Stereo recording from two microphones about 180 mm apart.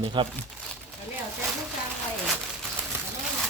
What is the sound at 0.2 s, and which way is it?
Speech, 25° right (ahead or behind).